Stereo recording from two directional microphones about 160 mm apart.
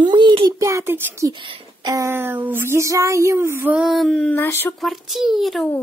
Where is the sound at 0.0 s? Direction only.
30° right (ahead or behind).